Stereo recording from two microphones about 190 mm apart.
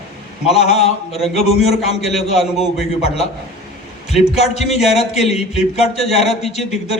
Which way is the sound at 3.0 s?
35° left (ahead or behind).